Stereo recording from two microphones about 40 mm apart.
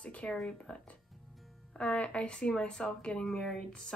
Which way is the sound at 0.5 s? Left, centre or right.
Left.